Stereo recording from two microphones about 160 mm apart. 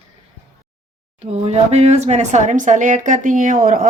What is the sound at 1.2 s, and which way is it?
Speech, 40° right (ahead or behind).